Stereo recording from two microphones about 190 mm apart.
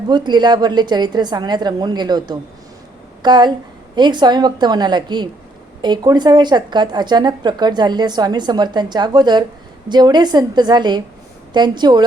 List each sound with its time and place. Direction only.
0.1 s a woman's voice: 25° right (ahead or behind)